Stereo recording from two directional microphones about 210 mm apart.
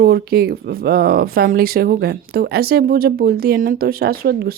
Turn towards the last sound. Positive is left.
turn(degrees=-45)  # may be behind; listen again after turning